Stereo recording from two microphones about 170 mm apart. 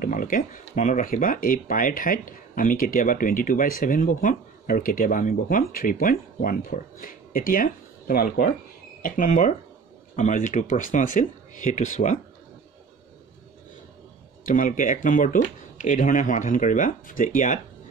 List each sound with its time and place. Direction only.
0.0 s speech: 55° left (ahead or behind)
14.4 s speech: 50° left (ahead or behind)